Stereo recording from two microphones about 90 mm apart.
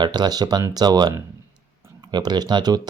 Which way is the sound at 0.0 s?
55° right (ahead or behind).